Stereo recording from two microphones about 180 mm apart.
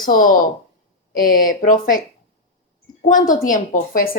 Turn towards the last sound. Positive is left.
turn(degrees=50)  # may be behind; listen again after turning